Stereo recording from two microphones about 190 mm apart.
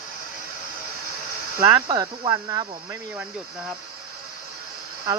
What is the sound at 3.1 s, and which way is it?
Speech, 5° right (ahead or behind).